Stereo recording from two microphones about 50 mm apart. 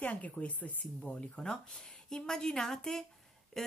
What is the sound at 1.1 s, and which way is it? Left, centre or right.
Speech, centre.